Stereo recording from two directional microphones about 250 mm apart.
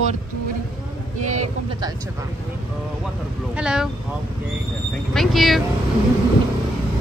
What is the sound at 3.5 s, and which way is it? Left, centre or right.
Speech, centre.